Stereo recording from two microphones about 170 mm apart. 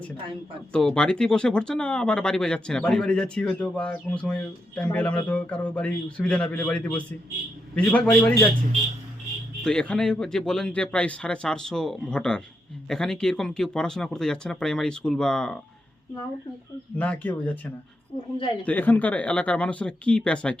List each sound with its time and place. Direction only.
0.7 s speech: 5° left (ahead or behind)
9.6 s speech: 5° left (ahead or behind)
17.0 s speech: 10° left (ahead or behind)
18.6 s speech: 10° left (ahead or behind)